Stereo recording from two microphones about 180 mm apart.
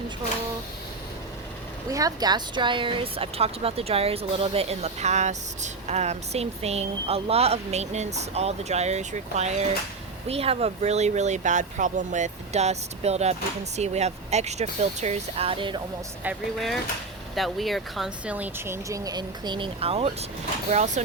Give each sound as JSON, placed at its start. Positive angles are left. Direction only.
{"t": 1.9, "sound": "speech", "side_deg": -20}
{"t": 16.2, "sound": "speech", "side_deg": -5}